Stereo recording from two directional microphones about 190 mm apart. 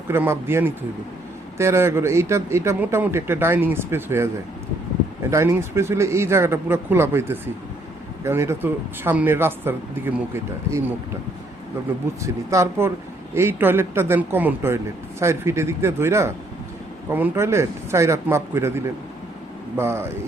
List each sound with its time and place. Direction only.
0.1 s a man's voice: 10° right (ahead or behind)
5.3 s a man's voice: 15° right (ahead or behind)
12.2 s a man's voice: 15° right (ahead or behind)